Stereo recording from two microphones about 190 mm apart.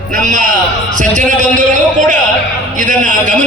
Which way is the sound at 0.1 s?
45° right (ahead or behind).